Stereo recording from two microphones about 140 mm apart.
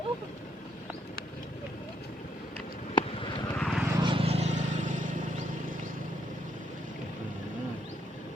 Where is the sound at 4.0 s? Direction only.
40° right (ahead or behind); by 5.8 s 65° right (ahead or behind).